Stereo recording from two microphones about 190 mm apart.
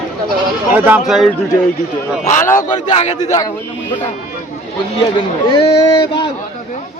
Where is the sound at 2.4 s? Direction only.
15° left (ahead or behind).